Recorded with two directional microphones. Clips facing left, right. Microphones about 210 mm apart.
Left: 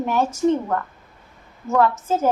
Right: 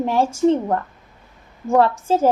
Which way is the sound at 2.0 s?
30° right (ahead or behind).